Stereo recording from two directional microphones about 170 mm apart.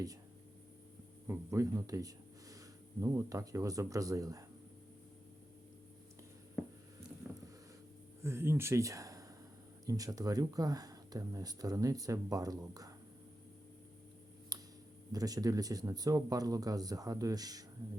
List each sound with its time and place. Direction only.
1.3 s speech: 15° right (ahead or behind)
8.2 s speech: 15° right (ahead or behind)
14.5 s a sound: 20° right (ahead or behind)
15.1 s speech: 20° right (ahead or behind)